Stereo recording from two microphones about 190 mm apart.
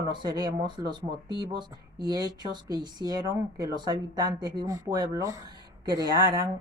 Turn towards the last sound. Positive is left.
turn(degrees=-20)  # may be behind; listen again after turning